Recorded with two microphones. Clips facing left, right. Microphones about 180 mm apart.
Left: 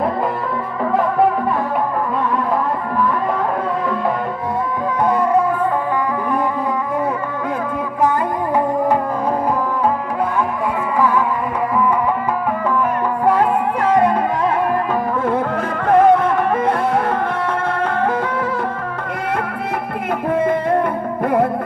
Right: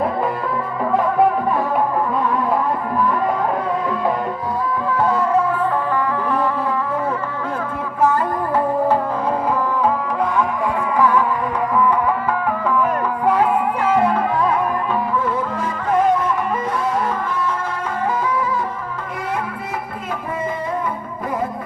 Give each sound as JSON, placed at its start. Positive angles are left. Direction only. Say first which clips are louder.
{"t": 14.9, "sound": "music", "louder": "left 2 dB", "side_deg": 50}
{"t": 20.3, "sound": "music", "louder": "left 8 dB", "side_deg": 60}